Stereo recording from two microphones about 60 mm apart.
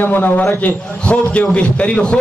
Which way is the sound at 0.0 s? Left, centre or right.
Left.